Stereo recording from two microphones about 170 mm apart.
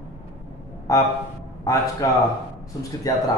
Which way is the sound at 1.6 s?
20° left (ahead or behind).